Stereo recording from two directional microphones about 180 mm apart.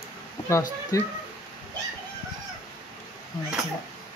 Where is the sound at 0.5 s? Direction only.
15° left (ahead or behind).